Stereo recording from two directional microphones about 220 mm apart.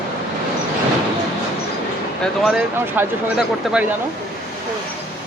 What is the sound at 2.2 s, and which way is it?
Speech, 5° right (ahead or behind).